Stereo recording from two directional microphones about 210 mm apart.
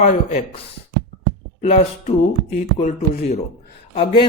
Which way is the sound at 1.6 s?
30° left (ahead or behind).